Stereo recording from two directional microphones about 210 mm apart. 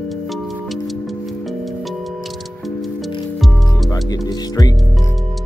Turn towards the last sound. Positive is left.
turn(degrees=20)  # may be behind; listen again after turning